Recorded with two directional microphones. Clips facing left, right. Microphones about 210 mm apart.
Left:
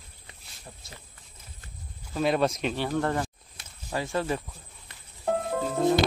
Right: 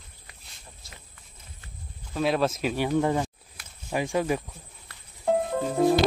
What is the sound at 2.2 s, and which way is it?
Speech, centre (ahead or behind).